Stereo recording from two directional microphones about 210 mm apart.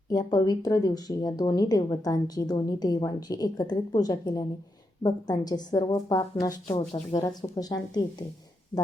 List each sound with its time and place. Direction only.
0.1 s a woman's voice: 20° left (ahead or behind)
6.7 s a woman's voice: 30° left (ahead or behind)
7.2 s a woman's voice: 15° left (ahead or behind)